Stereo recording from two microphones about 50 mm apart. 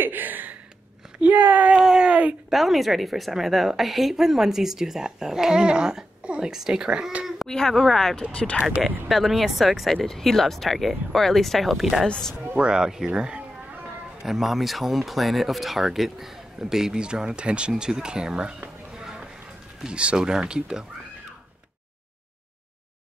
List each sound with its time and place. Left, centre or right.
0.0 s a sound: right
1.2 s speech: right
1.8 s speech: centre
2.0 s a sound: right
2.5 s speech: centre; by 7.2 s right
7.4 s speech: centre
8.3 s speech: left
8.8 s speech: centre
12.5 s speech: centre
18.9 s a sound: centre
19.8 s speech: right